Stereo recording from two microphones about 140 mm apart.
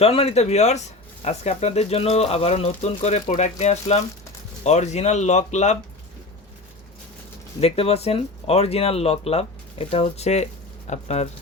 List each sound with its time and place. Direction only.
0.0 s speech: 45° left (ahead or behind)
7.6 s speech: 45° left (ahead or behind)